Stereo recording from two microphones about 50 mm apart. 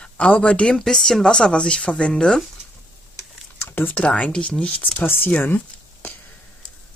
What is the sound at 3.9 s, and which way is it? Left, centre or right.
Speech, left.